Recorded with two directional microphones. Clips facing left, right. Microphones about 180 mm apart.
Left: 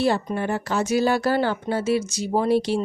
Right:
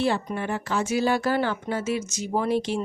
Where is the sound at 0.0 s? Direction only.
40° left (ahead or behind).